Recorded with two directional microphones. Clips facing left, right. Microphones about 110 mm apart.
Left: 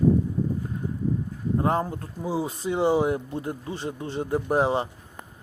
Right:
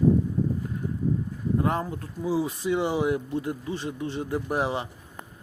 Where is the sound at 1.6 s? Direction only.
30° left (ahead or behind).